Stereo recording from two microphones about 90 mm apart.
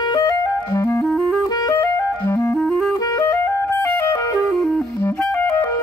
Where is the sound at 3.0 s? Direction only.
40° left (ahead or behind).